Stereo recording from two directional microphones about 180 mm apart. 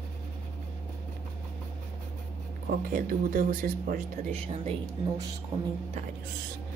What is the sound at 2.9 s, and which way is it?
Speech, 50° right (ahead or behind).